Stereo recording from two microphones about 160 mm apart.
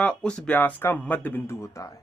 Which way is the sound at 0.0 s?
5° left (ahead or behind).